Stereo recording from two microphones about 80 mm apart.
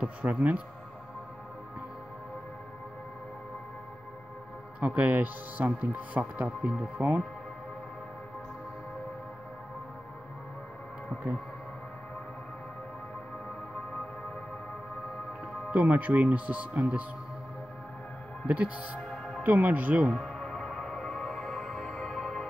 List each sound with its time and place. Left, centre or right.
0.0 s speech: centre
4.7 s speech: centre
15.7 s speech: centre
18.9 s music: centre
19.4 s speech: right
20.1 s music: centre